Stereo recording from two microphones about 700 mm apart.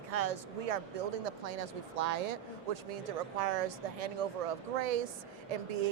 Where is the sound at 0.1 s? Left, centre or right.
Right.